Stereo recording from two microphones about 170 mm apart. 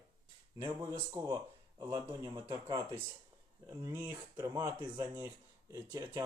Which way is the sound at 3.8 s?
15° right (ahead or behind).